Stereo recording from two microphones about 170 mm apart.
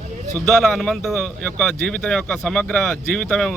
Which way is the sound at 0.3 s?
5° left (ahead or behind).